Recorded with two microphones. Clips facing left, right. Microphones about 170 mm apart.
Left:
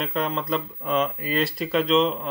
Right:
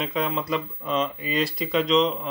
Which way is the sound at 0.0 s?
Centre (ahead or behind).